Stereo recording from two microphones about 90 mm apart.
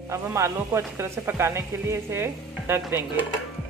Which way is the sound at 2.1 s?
25° right (ahead or behind).